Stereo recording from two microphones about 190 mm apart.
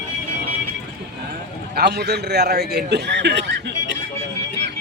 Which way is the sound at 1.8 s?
60° right (ahead or behind).